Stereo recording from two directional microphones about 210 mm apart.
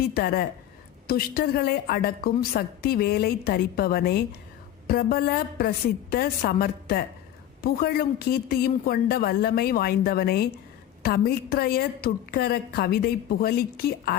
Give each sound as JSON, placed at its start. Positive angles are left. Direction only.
{"t": 0.1, "sound": "a woman's voice", "side_deg": 45}